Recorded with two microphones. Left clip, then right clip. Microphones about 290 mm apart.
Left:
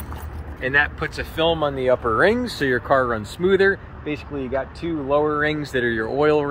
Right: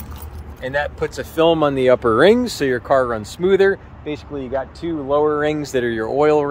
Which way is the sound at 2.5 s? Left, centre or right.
Centre.